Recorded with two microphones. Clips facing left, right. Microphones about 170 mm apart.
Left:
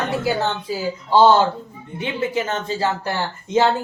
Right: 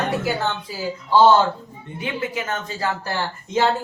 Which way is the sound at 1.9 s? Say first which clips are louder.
Left 4 dB; 25° left (ahead or behind).